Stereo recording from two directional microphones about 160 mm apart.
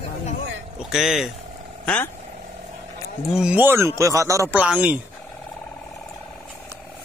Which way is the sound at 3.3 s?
5° right (ahead or behind).